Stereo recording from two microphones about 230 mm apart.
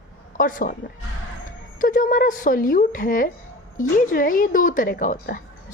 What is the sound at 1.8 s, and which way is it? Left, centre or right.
Speech, left.